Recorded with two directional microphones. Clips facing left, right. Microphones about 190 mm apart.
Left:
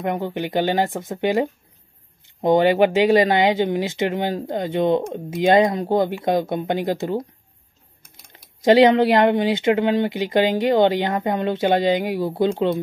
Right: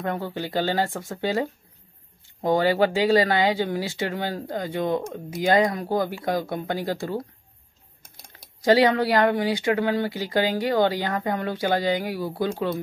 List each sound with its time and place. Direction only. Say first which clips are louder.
0.0 s speech: left 4 dB; 20° left (ahead or behind)
8.3 s speech: left 4 dB; 20° left (ahead or behind)